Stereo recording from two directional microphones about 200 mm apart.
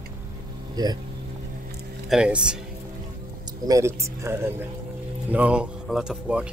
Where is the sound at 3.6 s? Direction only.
15° right (ahead or behind).